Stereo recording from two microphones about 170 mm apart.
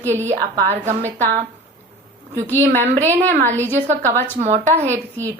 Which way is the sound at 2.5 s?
10° left (ahead or behind).